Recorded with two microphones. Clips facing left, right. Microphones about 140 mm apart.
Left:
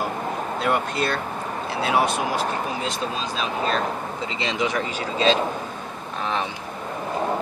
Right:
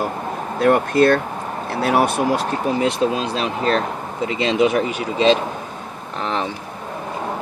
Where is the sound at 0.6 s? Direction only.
50° right (ahead or behind).